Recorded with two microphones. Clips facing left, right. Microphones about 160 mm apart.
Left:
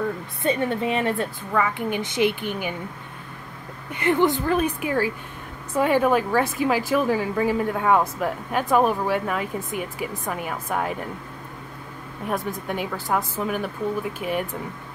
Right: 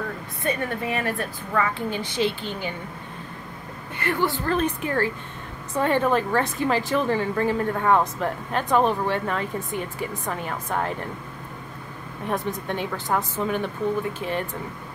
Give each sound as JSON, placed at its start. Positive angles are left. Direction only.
{"t": 0.4, "sound": "a woman's voice", "side_deg": 25}
{"t": 1.5, "sound": "a woman's voice", "side_deg": 15}
{"t": 3.9, "sound": "a woman's voice", "side_deg": 20}
{"t": 12.3, "sound": "a woman's voice", "side_deg": 5}